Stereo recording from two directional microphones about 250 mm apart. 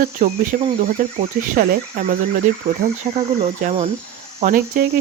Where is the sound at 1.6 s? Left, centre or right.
Right.